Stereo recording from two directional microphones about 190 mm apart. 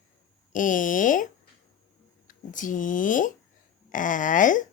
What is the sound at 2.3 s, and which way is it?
Speech, 45° left (ahead or behind).